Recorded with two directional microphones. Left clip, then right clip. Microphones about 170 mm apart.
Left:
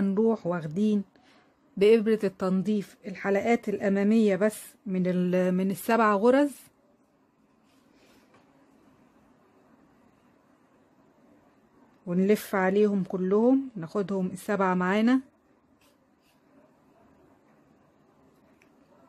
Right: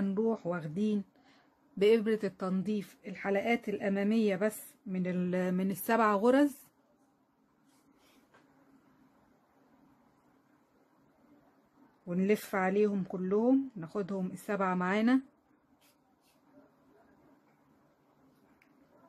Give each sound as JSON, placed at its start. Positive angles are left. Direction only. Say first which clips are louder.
{"t": 0.0, "sound": "speech", "louder": "left 7 dB", "side_deg": 20}
{"t": 12.1, "sound": "speech", "louder": "left 6 dB", "side_deg": 20}